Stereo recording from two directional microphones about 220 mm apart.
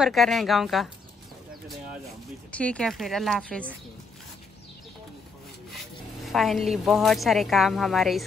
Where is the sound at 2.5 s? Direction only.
5° left (ahead or behind).